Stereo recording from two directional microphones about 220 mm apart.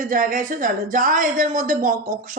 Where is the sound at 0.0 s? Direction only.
35° right (ahead or behind).